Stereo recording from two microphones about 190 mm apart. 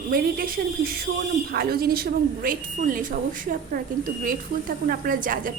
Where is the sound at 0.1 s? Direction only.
50° right (ahead or behind).